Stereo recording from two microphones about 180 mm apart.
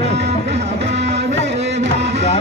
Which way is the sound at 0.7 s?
75° right (ahead or behind).